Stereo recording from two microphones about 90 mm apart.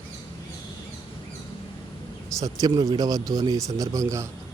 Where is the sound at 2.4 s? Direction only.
40° right (ahead or behind).